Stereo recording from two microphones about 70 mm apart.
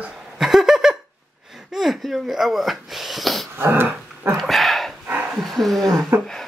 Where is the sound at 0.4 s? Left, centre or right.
Centre.